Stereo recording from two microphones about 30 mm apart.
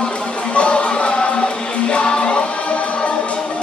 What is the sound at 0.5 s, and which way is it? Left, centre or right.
Music, left.